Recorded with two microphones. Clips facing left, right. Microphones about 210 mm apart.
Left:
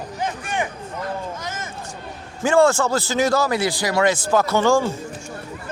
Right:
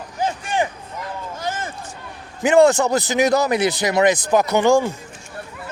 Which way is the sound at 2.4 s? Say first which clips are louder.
Right 3 dB; 20° right (ahead or behind).